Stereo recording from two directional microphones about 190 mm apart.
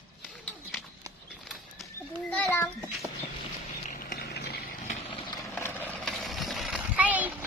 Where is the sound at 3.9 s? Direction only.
50° left (ahead or behind).